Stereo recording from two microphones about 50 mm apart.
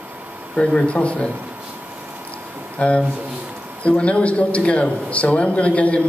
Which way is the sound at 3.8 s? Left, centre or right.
Left.